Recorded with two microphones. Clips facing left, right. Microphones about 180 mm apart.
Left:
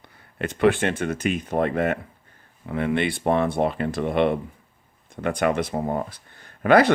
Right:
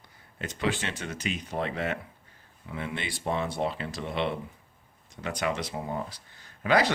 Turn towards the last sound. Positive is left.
turn(degrees=55)  # may be behind; listen again after turning